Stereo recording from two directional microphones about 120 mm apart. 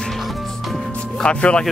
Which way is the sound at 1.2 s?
10° left (ahead or behind).